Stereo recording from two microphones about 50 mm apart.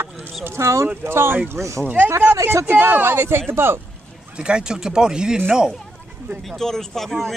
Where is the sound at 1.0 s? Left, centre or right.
Right.